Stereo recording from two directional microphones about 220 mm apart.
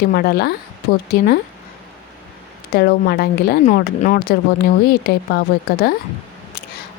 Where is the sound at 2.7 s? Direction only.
45° left (ahead or behind).